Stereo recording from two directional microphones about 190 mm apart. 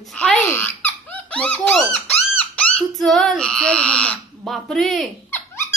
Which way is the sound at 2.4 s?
5° left (ahead or behind).